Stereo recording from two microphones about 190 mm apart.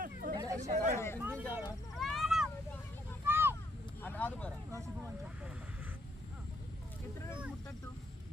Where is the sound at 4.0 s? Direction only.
10° left (ahead or behind).